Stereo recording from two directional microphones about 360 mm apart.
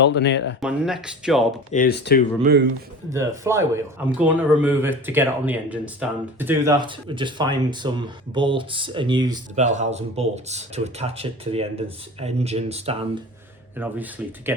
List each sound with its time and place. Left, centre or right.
0.0 s speech: left
0.6 s speech: centre
1.7 s speech: left
2.4 s a man's voice: right
3.1 s speech: centre
13.7 s speech: centre